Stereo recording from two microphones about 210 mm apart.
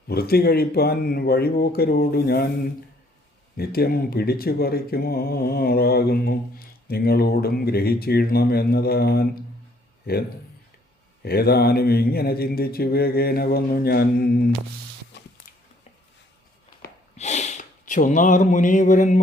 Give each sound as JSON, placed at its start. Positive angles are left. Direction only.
{"t": 0.1, "sound": "speech", "side_deg": 50}
{"t": 3.6, "sound": "speech", "side_deg": 45}
{"t": 17.2, "sound": "speech", "side_deg": 35}